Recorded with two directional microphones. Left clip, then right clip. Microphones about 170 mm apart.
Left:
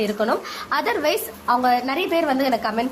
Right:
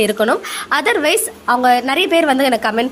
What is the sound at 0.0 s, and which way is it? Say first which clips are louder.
A woman's voice: right 7 dB; 25° right (ahead or behind).